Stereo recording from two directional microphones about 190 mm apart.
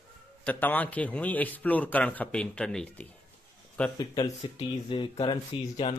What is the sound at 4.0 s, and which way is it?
Speech, 20° left (ahead or behind).